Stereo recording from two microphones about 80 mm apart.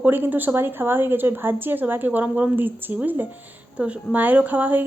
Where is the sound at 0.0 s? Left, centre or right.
Right.